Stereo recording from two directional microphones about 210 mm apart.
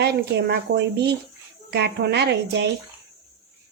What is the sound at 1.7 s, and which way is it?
Speech, 55° right (ahead or behind).